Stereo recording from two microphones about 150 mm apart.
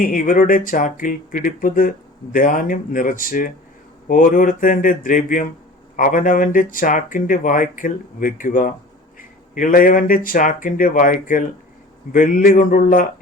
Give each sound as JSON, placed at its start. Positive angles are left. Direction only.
{"t": 0.0, "sound": "speech", "side_deg": 65}